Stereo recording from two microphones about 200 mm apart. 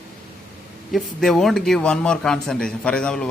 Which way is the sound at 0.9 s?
Centre (ahead or behind).